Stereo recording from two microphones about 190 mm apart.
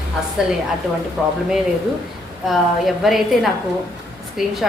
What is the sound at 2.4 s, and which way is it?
A woman's voice, centre (ahead or behind).